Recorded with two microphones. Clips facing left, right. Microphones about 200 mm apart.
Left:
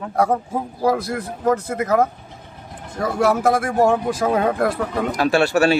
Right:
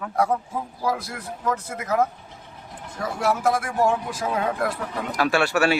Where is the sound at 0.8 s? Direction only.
45° left (ahead or behind).